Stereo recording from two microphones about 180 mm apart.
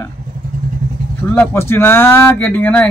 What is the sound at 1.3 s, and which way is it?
A man's voice, 10° left (ahead or behind).